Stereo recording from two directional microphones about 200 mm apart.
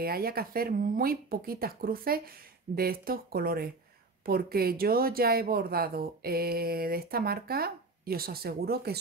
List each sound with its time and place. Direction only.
0.0 s speech: 50° right (ahead or behind)